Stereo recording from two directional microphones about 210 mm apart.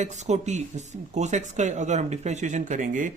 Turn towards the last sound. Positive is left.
turn(degrees=-35)  # may be behind; listen again after turning